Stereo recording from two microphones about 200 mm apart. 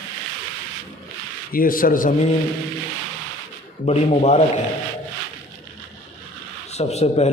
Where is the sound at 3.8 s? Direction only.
35° left (ahead or behind).